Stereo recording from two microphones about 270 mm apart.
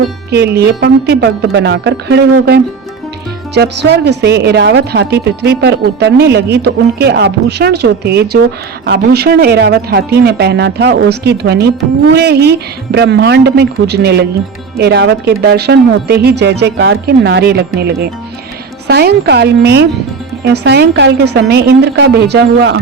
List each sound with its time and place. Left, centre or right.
0.3 s a woman's voice: right